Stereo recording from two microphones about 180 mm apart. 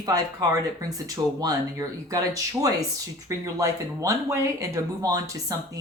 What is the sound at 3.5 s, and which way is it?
Speech, 20° right (ahead or behind).